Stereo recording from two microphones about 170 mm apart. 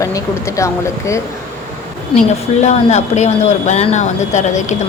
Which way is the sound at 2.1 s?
30° left (ahead or behind).